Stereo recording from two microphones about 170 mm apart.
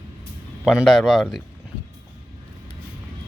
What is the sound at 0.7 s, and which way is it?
Speech, centre (ahead or behind).